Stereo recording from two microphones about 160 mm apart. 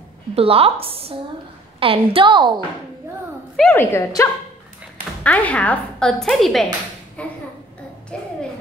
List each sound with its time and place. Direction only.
0.3 s a woman's voice: 35° right (ahead or behind)
3.5 s a woman's voice: 10° left (ahead or behind)
7.2 s a sound: 10° left (ahead or behind)
8.1 s a woman's voice: 5° left (ahead or behind)